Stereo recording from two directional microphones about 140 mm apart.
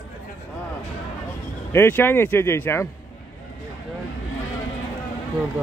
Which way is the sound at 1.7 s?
15° left (ahead or behind).